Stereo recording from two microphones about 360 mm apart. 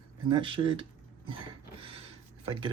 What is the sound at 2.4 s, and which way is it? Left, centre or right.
Speech, centre.